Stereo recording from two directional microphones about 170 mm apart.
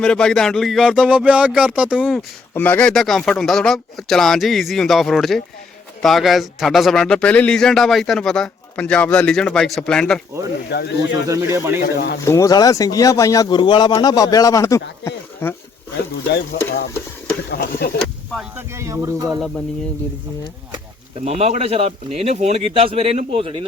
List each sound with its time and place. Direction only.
0.0 s speech: 5° left (ahead or behind)
2.5 s speech: 10° left (ahead or behind)
10.7 s speech: 85° left
11.3 s speech: 15° right (ahead or behind)
11.9 s speech: 80° left
12.2 s a man's voice: 15° left (ahead or behind)
16.3 s speech: 75° left (ahead or behind)
18.5 s speech: 15° right (ahead or behind)
21.2 s speech: 40° right (ahead or behind)